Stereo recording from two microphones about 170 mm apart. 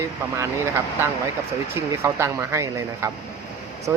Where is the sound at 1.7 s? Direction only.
15° right (ahead or behind).